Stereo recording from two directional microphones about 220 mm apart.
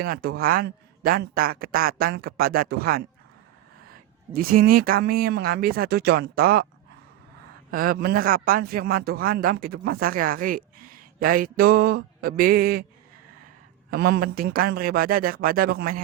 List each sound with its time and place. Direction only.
0.0 s a man's voice: 45° right (ahead or behind)
4.4 s speech: 40° right (ahead or behind)
7.7 s a man's voice: 40° right (ahead or behind)
13.9 s speech: 45° right (ahead or behind)